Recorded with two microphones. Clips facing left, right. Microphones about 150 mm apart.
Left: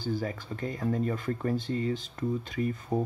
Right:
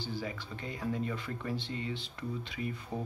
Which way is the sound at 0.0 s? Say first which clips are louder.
Left 6 dB; 45° left (ahead or behind).